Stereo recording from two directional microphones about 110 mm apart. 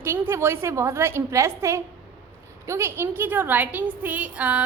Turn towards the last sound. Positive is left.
turn(degrees=-10)  # may be behind; listen again after turning